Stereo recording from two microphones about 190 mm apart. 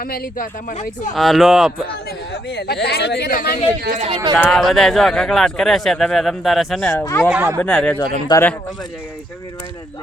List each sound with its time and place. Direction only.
0.0 s speech: 50° left (ahead or behind)
1.1 s speech: centre (ahead or behind)
2.3 s speech: 60° left (ahead or behind)
3.8 s speech: 40° right (ahead or behind)
4.4 s speech: 5° left (ahead or behind)
6.9 s speech: 15° left (ahead or behind)
7.2 s speech: 5° right (ahead or behind)
7.6 s speech: 5° left (ahead or behind)
7.9 s speech: 20° left (ahead or behind)